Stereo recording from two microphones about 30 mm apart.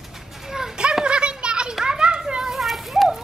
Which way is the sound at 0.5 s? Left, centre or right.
Centre.